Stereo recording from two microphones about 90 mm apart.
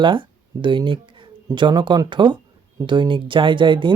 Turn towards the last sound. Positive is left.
turn(degrees=-65)  # may be behind; listen again after turning